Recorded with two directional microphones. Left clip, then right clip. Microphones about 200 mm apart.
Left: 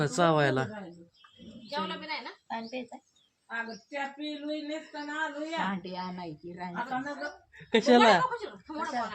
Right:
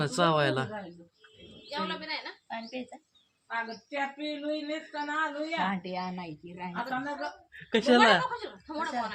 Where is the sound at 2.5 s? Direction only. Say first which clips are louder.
Left 2 dB; 10° left (ahead or behind).